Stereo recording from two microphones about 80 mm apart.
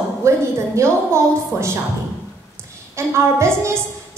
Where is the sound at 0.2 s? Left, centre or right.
Right.